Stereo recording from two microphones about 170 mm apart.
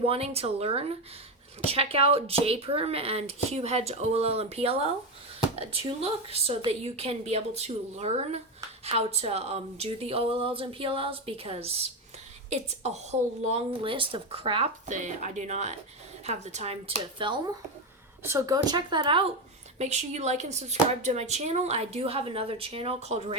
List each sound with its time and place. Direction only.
0.0 s speech: 35° right (ahead or behind)
6.0 s speech: 35° right (ahead or behind)
14.8 s speech: 45° right (ahead or behind); by 17.4 s 30° right (ahead or behind)
18.2 s a woman's voice: 15° right (ahead or behind)
19.8 s speech: 40° right (ahead or behind)